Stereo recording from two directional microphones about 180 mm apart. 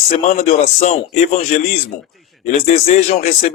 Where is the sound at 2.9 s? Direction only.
35° left (ahead or behind).